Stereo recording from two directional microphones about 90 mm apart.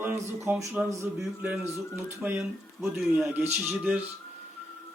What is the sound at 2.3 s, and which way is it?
Speech, 5° right (ahead or behind).